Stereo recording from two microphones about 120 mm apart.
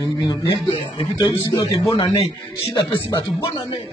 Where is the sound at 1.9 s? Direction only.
45° left (ahead or behind).